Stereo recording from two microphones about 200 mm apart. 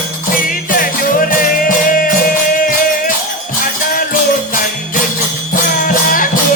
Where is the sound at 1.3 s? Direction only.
45° left (ahead or behind).